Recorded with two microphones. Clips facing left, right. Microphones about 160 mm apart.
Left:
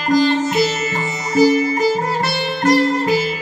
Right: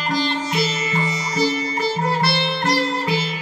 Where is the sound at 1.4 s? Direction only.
45° left (ahead or behind).